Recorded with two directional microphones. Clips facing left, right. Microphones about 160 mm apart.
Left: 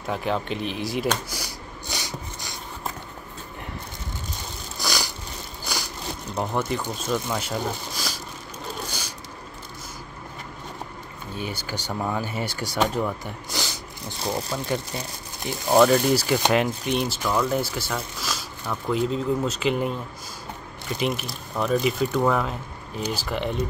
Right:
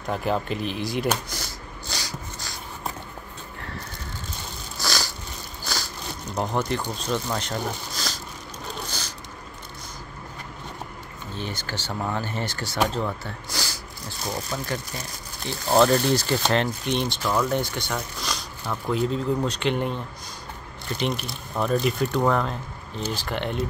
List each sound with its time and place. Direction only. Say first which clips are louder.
0.0 s speech: right 1 dB; centre (ahead or behind)
1.4 s a sound: left 1 dB; 20° left (ahead or behind)
4.7 s a sound: even; 15° left (ahead or behind)
6.4 s speech: even; centre (ahead or behind)
11.3 s speech: left 1 dB; 10° left (ahead or behind)
15.8 s speech: left 2 dB; 5° left (ahead or behind)